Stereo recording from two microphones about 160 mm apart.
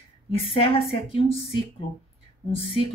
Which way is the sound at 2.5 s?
35° left (ahead or behind).